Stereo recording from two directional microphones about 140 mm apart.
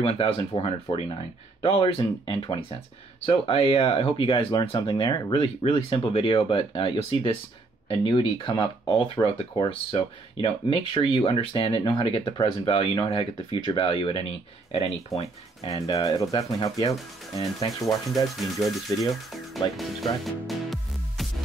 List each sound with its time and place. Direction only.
0.0 s speech: 40° left (ahead or behind)
15.1 s speech: centre (ahead or behind)
15.6 s speech: 25° left (ahead or behind)
17.8 s speech: centre (ahead or behind)
19.5 s music: centre (ahead or behind)